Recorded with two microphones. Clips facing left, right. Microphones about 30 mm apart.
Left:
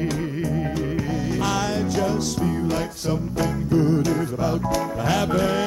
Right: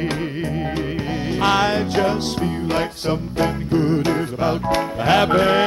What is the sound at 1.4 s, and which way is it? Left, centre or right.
Music, right.